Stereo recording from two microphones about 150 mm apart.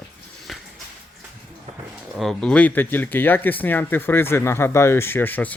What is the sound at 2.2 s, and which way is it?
Speech, 5° left (ahead or behind).